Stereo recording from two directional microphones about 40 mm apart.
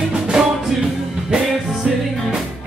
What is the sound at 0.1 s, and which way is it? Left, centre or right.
Music, centre.